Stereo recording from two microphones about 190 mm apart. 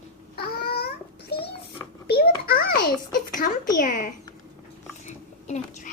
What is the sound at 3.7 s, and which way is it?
Speech, 45° left (ahead or behind).